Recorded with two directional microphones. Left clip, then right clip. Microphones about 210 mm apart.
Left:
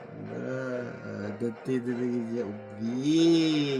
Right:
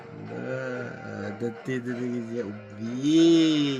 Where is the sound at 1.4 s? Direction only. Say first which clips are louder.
Left 1 dB; 10° right (ahead or behind).